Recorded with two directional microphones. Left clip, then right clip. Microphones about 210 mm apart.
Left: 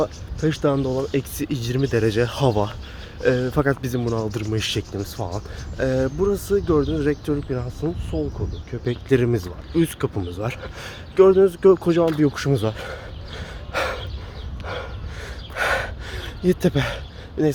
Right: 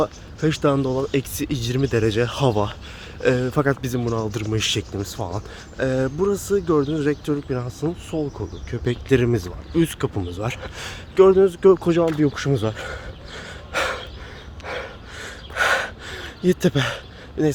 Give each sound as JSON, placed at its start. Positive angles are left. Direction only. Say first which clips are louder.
{"t": 0.0, "sound": "speech", "louder": "right 1 dB", "side_deg": -15}
{"t": 12.0, "sound": "a sound", "louder": "left 1 dB", "side_deg": 0}
{"t": 14.7, "sound": "gasp", "louder": "right 1 dB", "side_deg": -10}